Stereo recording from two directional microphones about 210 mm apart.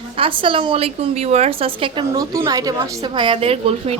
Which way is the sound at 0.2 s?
25° right (ahead or behind).